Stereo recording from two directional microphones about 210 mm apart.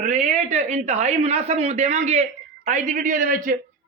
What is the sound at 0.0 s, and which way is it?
A man's voice, 35° right (ahead or behind).